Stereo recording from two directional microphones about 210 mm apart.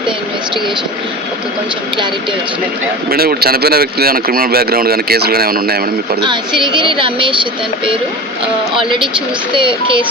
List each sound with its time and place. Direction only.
3.1 s speech: 45° right (ahead or behind)
6.2 s speech: 20° right (ahead or behind)
8.7 s speech: 25° right (ahead or behind)